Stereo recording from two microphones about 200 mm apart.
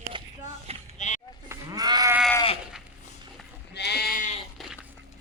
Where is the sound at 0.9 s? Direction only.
35° left (ahead or behind).